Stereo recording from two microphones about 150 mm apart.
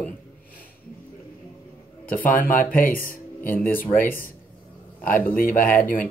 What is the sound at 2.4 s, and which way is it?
Speech, 65° left (ahead or behind).